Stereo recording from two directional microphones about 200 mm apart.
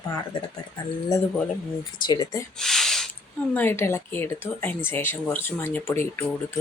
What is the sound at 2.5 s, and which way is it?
Speech, centre (ahead or behind).